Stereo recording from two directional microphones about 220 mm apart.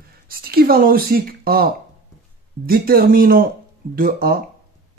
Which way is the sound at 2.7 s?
40° right (ahead or behind).